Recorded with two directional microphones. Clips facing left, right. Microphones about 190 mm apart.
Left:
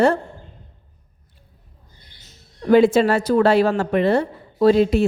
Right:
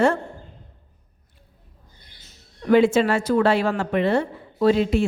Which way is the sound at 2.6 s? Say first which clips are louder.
Left 3 dB; 40° left (ahead or behind).